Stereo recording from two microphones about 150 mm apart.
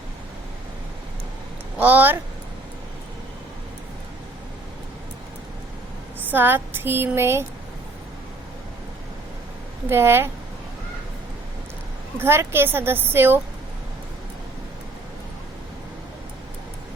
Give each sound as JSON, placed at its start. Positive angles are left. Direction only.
{"t": 1.8, "sound": "a woman's voice", "side_deg": -10}
{"t": 6.3, "sound": "a woman's voice", "side_deg": -15}
{"t": 9.9, "sound": "a woman's voice", "side_deg": -15}
{"t": 12.1, "sound": "a woman's voice", "side_deg": -15}